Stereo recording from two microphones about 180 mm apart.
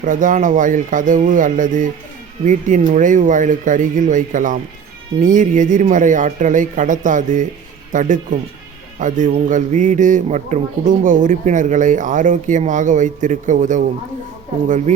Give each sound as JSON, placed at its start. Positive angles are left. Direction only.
{"t": 0.0, "sound": "a man's voice", "side_deg": -45}
{"t": 14.9, "sound": "speech", "side_deg": -40}